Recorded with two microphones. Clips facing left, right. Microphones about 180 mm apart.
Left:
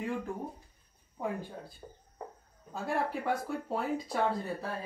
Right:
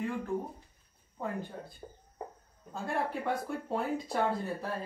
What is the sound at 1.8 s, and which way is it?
Speech, 15° right (ahead or behind).